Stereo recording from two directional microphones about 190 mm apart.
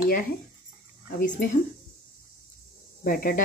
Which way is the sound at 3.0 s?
50° left (ahead or behind).